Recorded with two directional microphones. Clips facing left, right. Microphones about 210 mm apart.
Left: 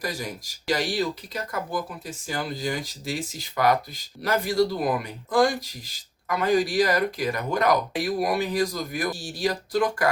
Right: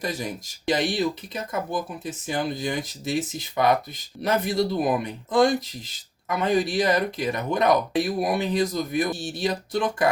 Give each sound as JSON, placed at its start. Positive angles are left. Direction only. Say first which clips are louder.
{"t": 0.0, "sound": "speech", "louder": "right 2 dB", "side_deg": -20}